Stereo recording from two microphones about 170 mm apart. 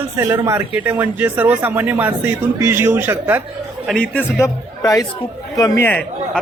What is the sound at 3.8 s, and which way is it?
Speech, 5° left (ahead or behind).